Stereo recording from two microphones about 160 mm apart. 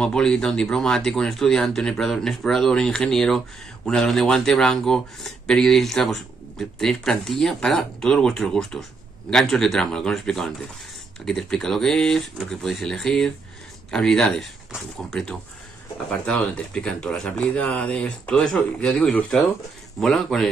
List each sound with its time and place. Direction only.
0.0 s speech: 5° left (ahead or behind)